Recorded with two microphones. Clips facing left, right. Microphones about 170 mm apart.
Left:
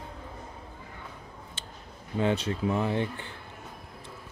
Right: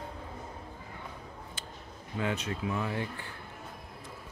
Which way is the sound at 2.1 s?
30° left (ahead or behind).